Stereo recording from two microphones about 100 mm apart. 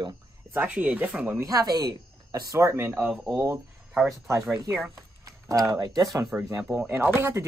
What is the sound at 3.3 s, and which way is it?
Speech, 30° right (ahead or behind).